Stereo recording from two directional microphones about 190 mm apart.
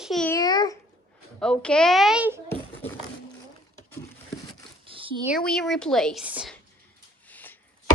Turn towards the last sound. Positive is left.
turn(degrees=10)  # may be behind; listen again after turning